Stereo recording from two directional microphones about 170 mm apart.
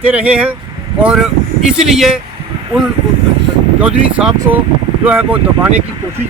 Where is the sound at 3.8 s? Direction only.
5° right (ahead or behind).